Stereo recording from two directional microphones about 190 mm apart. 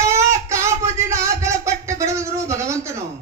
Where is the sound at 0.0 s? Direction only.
15° right (ahead or behind).